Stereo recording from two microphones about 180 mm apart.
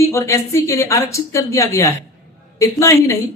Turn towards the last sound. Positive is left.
turn(degrees=15)  # may be behind; listen again after turning